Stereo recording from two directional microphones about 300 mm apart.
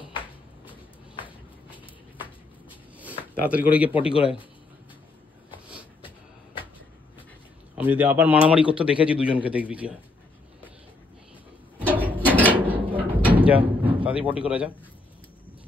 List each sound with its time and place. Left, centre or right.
3.4 s speech: centre
3.9 s speech: centre
7.7 s speech: centre
11.8 s a sound: centre
12.7 s drawer open or close: centre
13.4 s a sound: centre
14.4 s speech: centre